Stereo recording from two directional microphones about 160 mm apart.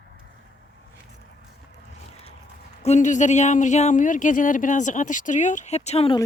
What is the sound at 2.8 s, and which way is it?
Speech, 45° left (ahead or behind).